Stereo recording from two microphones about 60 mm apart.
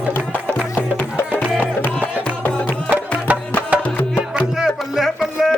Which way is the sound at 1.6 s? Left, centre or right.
Left.